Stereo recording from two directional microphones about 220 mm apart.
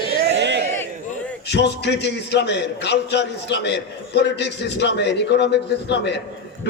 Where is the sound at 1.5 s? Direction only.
50° left (ahead or behind).